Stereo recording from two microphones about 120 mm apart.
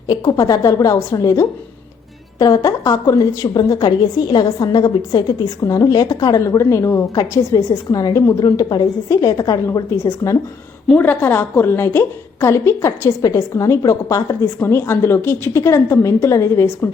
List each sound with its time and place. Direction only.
0.1 s a woman's voice: 30° left (ahead or behind)
10.8 s a woman's voice: 15° left (ahead or behind)